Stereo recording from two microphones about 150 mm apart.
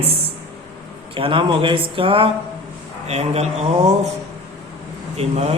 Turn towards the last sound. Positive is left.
turn(degrees=-45)  # may be behind; listen again after turning